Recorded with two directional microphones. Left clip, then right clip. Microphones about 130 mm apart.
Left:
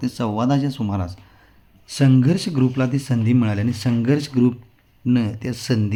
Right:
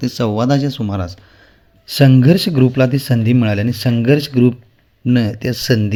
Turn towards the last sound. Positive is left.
turn(degrees=-20)  # may be behind; listen again after turning